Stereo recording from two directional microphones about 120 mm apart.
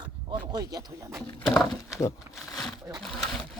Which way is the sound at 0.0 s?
40° right (ahead or behind).